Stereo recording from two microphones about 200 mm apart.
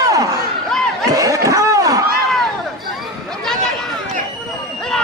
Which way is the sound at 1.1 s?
15° right (ahead or behind).